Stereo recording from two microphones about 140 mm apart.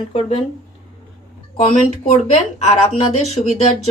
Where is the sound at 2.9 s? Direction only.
50° left (ahead or behind).